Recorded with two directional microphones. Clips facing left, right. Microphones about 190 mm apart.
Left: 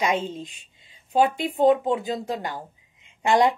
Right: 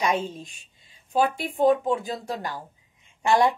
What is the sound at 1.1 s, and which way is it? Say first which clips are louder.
Speech: left 3 dB; 20° left (ahead or behind).